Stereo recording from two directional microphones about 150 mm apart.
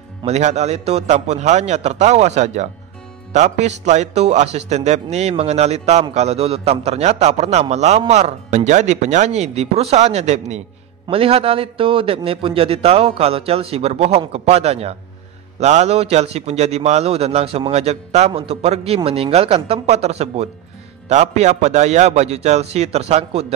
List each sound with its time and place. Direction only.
0.2 s a man's voice: 45° right (ahead or behind)